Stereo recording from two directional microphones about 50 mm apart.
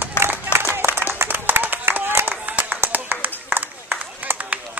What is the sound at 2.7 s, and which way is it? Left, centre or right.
Run, right.